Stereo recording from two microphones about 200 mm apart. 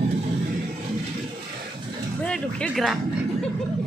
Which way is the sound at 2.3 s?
5° left (ahead or behind).